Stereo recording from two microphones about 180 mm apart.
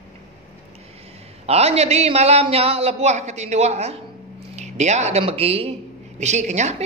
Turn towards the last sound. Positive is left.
turn(degrees=-40)  # may be behind; listen again after turning